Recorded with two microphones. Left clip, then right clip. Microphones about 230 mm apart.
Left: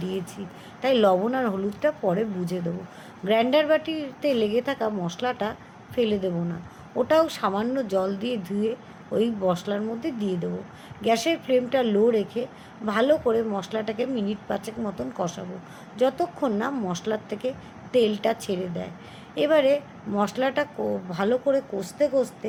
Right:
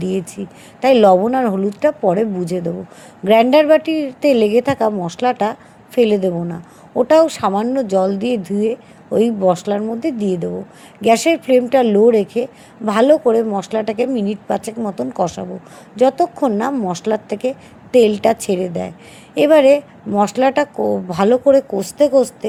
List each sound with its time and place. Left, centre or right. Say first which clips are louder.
0.0 s a woman's voice: right 9 dB; right